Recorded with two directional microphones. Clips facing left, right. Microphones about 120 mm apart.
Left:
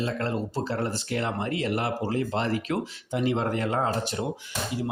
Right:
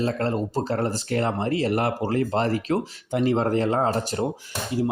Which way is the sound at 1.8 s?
50° right (ahead or behind).